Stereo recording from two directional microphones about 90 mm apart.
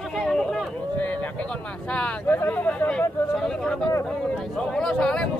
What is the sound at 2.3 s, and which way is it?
Speech, 20° left (ahead or behind).